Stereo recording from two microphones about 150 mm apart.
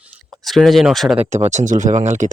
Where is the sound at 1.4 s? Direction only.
55° right (ahead or behind).